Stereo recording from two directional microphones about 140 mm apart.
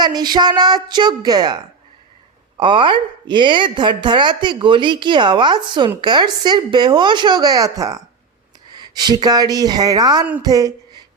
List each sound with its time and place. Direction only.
0.0 s speech: 30° right (ahead or behind)
2.6 s speech: 35° right (ahead or behind)